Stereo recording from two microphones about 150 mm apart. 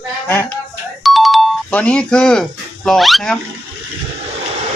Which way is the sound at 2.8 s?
Centre (ahead or behind).